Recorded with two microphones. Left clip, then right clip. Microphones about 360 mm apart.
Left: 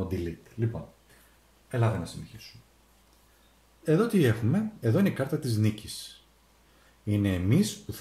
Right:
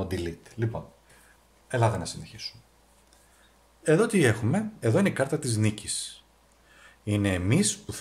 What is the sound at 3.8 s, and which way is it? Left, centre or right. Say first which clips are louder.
Speech: right 3 dB; centre.